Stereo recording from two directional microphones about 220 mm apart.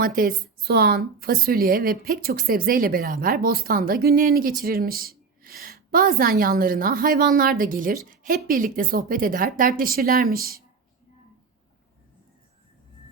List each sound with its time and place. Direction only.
0.0 s a woman's voice: 40° right (ahead or behind)